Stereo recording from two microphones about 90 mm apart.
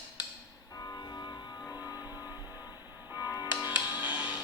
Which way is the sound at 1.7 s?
45° left (ahead or behind).